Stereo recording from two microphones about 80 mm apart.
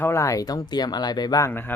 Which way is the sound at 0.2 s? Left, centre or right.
Left.